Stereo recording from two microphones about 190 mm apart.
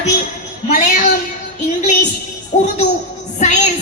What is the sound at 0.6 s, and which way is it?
Speech, 45° left (ahead or behind).